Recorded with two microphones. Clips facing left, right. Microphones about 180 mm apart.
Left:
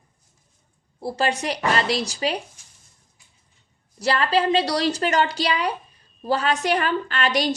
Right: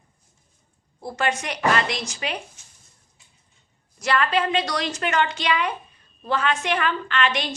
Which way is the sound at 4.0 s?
35° left (ahead or behind).